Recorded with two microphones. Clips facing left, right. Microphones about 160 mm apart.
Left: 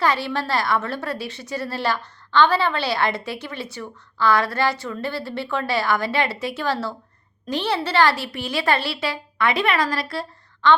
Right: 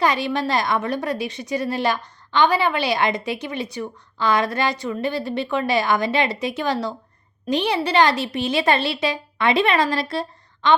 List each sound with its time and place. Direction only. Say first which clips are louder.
0.0 s a woman's voice: right 2 dB; 15° right (ahead or behind)